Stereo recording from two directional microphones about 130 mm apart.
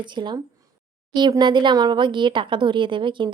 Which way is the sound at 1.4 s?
35° right (ahead or behind).